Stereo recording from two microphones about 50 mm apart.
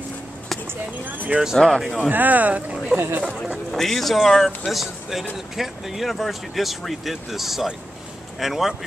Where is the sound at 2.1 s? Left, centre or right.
Right.